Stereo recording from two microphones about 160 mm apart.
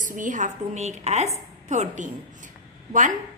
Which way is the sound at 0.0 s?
55° right (ahead or behind).